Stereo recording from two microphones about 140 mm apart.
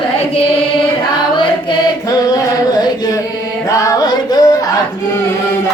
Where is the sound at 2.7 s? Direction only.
30° left (ahead or behind).